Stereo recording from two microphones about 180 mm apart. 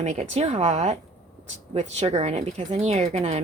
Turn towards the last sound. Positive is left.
turn(degrees=-35)  # may be behind; listen again after turning